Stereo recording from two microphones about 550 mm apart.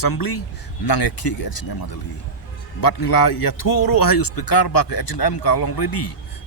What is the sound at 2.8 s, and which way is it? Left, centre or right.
Speech, left.